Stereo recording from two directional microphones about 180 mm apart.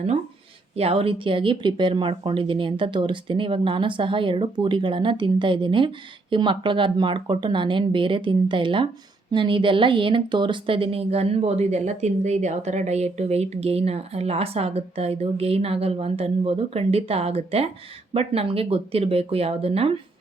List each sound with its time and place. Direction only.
0.8 s speech: 30° right (ahead or behind)